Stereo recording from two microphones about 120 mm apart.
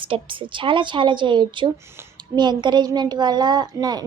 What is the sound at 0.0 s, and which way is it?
A woman's voice, 45° right (ahead or behind).